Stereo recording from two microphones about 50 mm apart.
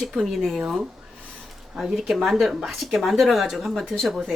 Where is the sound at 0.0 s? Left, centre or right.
Centre.